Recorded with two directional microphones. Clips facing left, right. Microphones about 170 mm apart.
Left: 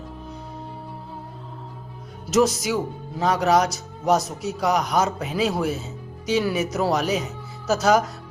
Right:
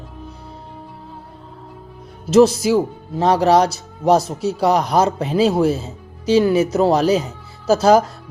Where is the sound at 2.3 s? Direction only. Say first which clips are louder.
Right 8 dB; 30° right (ahead or behind).